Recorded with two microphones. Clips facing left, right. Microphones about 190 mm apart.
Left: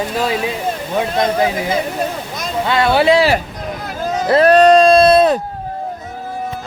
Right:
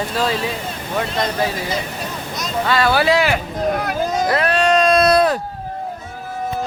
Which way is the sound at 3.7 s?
70° right (ahead or behind).